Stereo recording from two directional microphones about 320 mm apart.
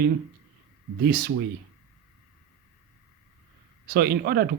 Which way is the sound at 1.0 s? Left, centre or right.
Right.